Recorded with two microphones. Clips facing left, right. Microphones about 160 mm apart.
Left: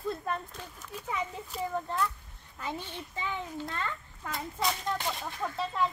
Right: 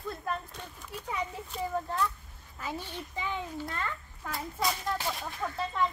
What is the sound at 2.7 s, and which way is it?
Speech, 15° right (ahead or behind).